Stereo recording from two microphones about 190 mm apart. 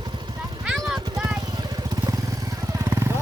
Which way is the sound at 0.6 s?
Centre (ahead or behind).